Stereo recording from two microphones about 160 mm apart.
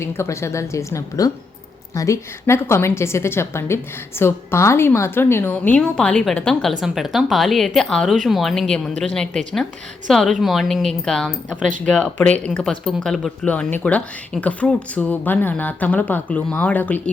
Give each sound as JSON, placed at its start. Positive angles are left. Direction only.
{"t": 0.0, "sound": "a woman's voice", "side_deg": 15}
{"t": 10.1, "sound": "a woman's voice", "side_deg": 0}